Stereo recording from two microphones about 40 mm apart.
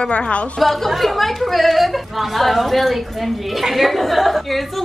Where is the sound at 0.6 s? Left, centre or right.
Centre.